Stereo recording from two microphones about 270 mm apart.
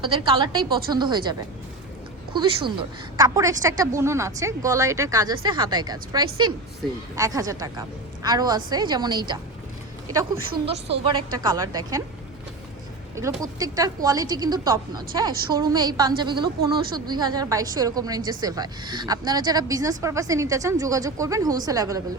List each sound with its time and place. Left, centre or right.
0.0 s a woman's voice: centre
10.8 s a woman's voice: centre
13.1 s a woman's voice: centre